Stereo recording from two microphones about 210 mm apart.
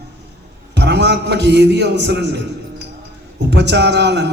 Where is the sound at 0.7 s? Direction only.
55° right (ahead or behind).